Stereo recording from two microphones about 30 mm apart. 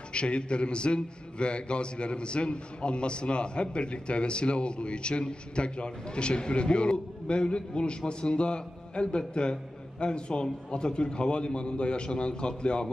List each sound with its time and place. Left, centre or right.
0.1 s a man's voice: left